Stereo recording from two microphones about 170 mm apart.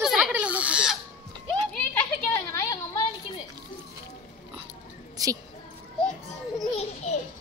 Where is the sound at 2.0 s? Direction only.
15° left (ahead or behind).